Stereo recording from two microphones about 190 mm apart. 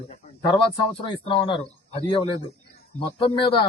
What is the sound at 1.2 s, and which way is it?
Speech, 25° left (ahead or behind).